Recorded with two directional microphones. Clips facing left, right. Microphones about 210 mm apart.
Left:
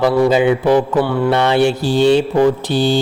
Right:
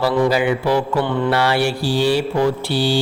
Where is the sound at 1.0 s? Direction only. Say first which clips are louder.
Left 3 dB; 10° left (ahead or behind).